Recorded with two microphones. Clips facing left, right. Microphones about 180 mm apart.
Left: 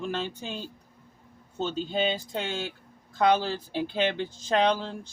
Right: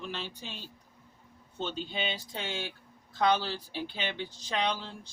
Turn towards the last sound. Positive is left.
turn(degrees=45)  # may be behind; listen again after turning